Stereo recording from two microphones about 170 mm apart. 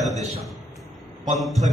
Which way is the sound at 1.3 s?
Centre (ahead or behind).